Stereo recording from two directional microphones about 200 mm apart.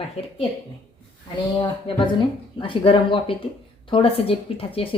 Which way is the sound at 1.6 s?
25° left (ahead or behind).